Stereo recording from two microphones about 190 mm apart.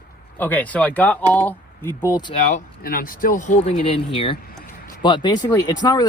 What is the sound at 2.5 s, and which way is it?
Speech, 45° left (ahead or behind).